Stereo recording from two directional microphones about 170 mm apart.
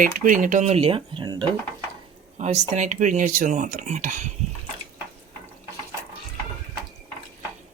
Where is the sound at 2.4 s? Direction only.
45° right (ahead or behind).